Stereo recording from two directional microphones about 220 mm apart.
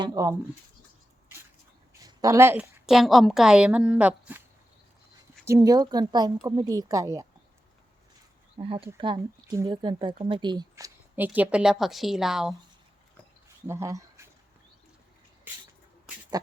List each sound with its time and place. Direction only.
0.0 s speech: 15° right (ahead or behind)
1.9 s a woman's voice: 15° right (ahead or behind)
5.5 s speech: 15° right (ahead or behind)
8.5 s speech: 25° right (ahead or behind); by 12.5 s centre (ahead or behind)
13.7 s speech: 15° right (ahead or behind)